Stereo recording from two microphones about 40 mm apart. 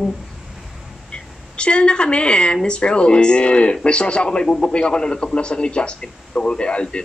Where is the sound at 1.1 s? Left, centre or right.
Left.